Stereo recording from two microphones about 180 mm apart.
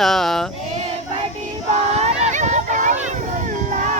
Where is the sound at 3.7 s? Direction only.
45° right (ahead or behind).